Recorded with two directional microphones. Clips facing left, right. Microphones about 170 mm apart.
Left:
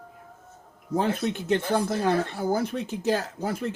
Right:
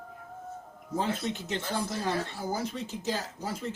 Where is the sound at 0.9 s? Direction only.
60° left (ahead or behind).